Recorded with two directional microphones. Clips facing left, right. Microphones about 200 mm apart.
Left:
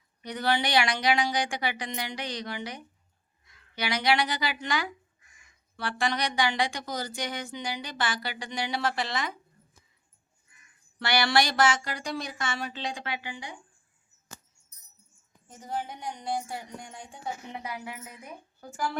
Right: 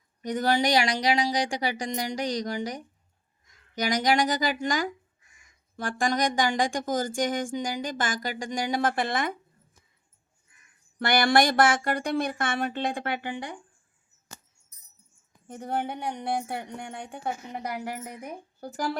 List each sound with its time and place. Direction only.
0.2 s speech: 45° right (ahead or behind)
11.0 s speech: 50° right (ahead or behind)
15.4 s speech: 60° right (ahead or behind)
17.5 s speech: 45° right (ahead or behind)
18.0 s speech: 65° right (ahead or behind)
18.6 s speech: 35° right (ahead or behind)